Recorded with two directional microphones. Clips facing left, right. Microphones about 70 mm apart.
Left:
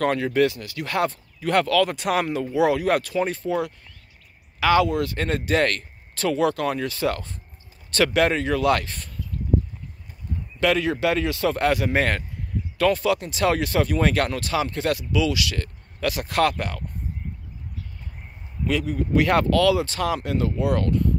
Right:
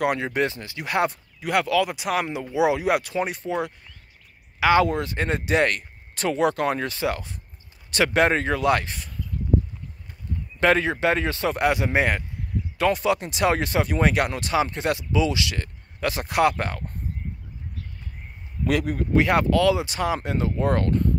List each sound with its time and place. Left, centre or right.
0.0 s speech: centre
2.5 s speech: centre
10.6 s speech: right
18.7 s a man's voice: right
19.1 s speech: centre
20.6 s speech: right